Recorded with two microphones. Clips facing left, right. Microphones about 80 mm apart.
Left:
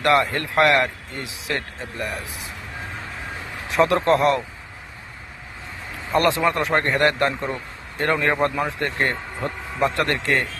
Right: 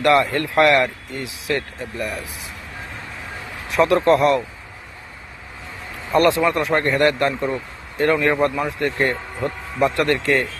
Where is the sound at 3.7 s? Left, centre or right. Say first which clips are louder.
Right 2 dB; left.